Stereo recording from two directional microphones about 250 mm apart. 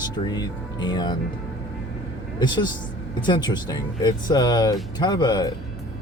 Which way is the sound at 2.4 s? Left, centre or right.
Centre.